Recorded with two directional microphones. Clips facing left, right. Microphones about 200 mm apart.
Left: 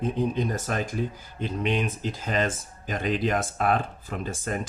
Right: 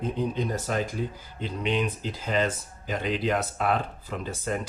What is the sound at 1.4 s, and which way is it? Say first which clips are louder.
Speech: left 1 dB; 50° left (ahead or behind).